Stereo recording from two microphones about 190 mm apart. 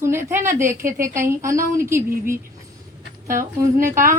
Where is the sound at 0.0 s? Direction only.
15° right (ahead or behind).